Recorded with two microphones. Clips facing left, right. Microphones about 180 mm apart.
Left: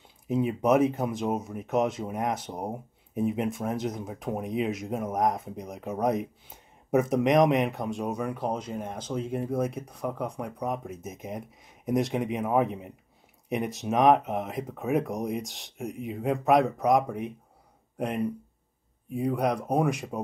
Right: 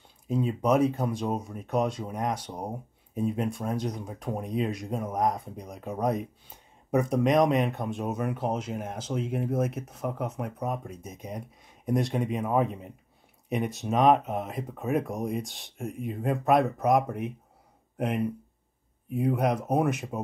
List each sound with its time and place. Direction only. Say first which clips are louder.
0.3 s speech: left 1 dB; 10° left (ahead or behind)
1.6 s speech: left 1 dB; 20° left (ahead or behind)
2.0 s speech: left 1 dB; 5° left (ahead or behind)
3.4 s speech: left 1 dB; 20° left (ahead or behind)
4.3 s speech: left 1 dB; centre (ahead or behind)
4.8 s speech: left 1 dB; 15° left (ahead or behind)
5.1 s speech: left 1 dB; centre (ahead or behind)
7.3 s speech: left 1 dB; 15° left (ahead or behind)
7.6 s speech: left 1 dB; centre (ahead or behind)